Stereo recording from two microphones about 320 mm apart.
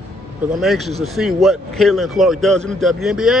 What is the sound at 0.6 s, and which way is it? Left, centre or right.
A man's voice, centre.